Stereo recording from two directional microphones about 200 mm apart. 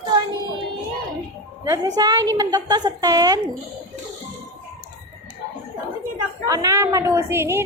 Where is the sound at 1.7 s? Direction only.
20° right (ahead or behind).